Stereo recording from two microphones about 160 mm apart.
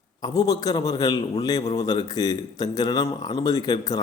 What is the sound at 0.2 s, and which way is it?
A man's voice, 20° left (ahead or behind).